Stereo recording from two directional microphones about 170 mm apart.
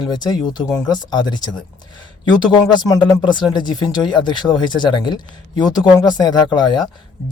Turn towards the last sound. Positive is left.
turn(degrees=25)  # may be behind; listen again after turning